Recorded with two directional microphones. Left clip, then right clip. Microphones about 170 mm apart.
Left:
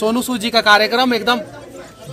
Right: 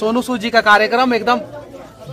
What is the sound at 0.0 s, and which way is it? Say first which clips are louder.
Speech: even; 10° left (ahead or behind).